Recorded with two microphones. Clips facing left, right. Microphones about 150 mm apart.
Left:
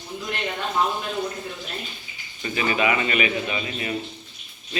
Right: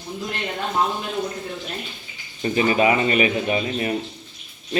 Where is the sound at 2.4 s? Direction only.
35° right (ahead or behind).